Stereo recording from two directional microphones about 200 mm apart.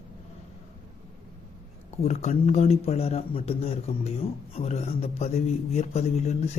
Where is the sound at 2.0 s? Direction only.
35° left (ahead or behind).